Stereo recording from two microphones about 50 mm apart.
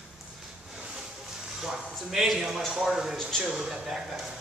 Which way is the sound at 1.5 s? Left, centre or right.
Centre.